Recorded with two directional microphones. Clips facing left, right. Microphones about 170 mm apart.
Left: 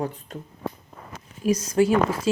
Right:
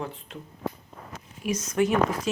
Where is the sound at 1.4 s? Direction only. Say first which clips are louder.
Left 5 dB; 35° left (ahead or behind).